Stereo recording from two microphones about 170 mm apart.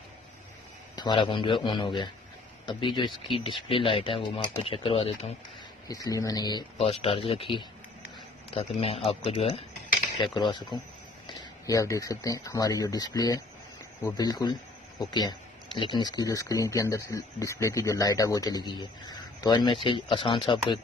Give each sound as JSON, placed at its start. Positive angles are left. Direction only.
{"t": 0.9, "sound": "speech", "side_deg": 25}
{"t": 5.9, "sound": "speech", "side_deg": 20}